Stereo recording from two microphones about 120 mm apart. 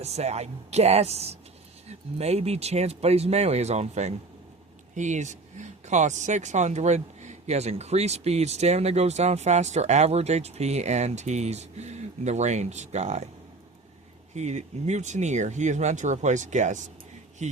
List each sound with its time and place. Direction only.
0.0 s speech: 65° right (ahead or behind)
4.9 s speech: 85° right; by 13.2 s 70° right (ahead or behind)
14.3 s speech: 70° right (ahead or behind)